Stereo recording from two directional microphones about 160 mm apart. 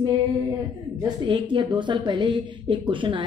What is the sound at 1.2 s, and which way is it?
Speech, 30° right (ahead or behind).